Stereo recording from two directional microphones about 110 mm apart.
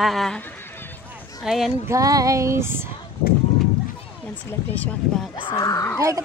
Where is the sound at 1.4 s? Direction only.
5° right (ahead or behind).